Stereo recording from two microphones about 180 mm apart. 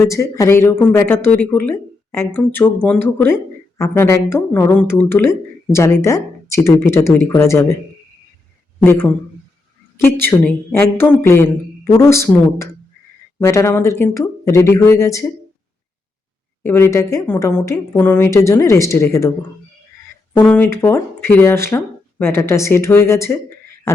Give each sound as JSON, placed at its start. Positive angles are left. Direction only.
{"t": 0.0, "sound": "speech", "side_deg": 15}
{"t": 8.8, "sound": "speech", "side_deg": 10}
{"t": 16.6, "sound": "speech", "side_deg": 15}
{"t": 20.5, "sound": "speech", "side_deg": 10}